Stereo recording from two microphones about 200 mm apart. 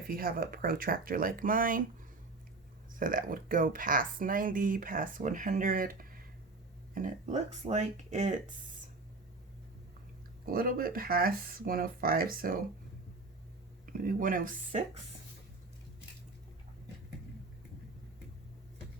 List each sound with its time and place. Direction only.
0.1 s speech: 45° right (ahead or behind)
2.9 s speech: 45° right (ahead or behind)
10.4 s speech: 45° right (ahead or behind)
13.8 s speech: 45° right (ahead or behind)